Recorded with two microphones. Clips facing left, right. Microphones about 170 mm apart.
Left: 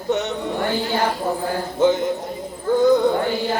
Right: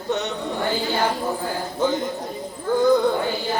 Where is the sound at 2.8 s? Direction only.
20° left (ahead or behind).